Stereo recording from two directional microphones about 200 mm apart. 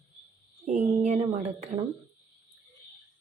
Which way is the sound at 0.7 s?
35° right (ahead or behind).